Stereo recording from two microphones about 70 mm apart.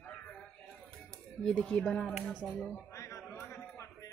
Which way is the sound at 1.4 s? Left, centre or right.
Centre.